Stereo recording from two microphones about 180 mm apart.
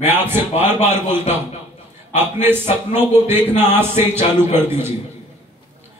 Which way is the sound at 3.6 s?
10° right (ahead or behind).